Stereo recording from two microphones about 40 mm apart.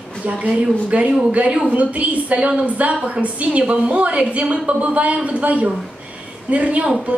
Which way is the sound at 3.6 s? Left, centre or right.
Right.